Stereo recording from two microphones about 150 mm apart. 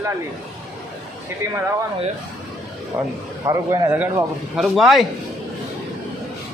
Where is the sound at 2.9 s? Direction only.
20° right (ahead or behind).